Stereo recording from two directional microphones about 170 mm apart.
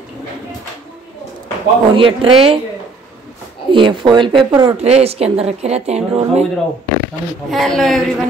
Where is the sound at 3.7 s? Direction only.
30° right (ahead or behind).